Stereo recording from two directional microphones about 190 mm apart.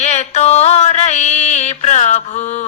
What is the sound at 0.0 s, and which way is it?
Mantra, 35° left (ahead or behind).